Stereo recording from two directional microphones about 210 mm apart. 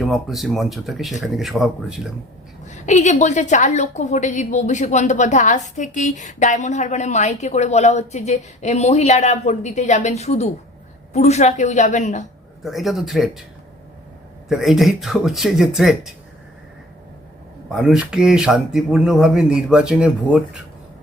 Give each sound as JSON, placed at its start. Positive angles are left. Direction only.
{"t": 0.0, "sound": "speech", "side_deg": 0}
{"t": 2.6, "sound": "a woman's voice", "side_deg": 35}
{"t": 12.6, "sound": "speech", "side_deg": 0}
{"t": 14.5, "sound": "speech", "side_deg": 0}
{"t": 17.7, "sound": "speech", "side_deg": -5}